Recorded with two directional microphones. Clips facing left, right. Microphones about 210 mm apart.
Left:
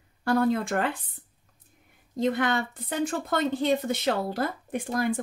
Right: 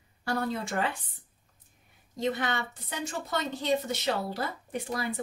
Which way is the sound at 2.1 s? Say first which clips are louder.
Left 5 dB; 55° left (ahead or behind).